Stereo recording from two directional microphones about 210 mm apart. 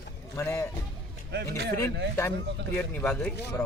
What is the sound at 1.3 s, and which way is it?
Speech, 50° right (ahead or behind).